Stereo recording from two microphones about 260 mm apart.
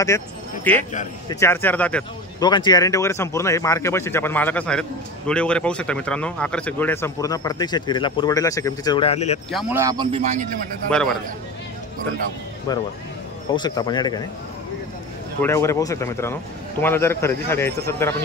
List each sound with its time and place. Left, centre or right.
1.3 s speech: centre
2.4 s speech: centre
9.5 s speech: centre; by 10.5 s right
10.9 s a man's voice: centre
13.5 s speech: centre
15.4 s speech: centre